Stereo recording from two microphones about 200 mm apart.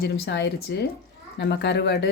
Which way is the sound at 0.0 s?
60° left (ahead or behind).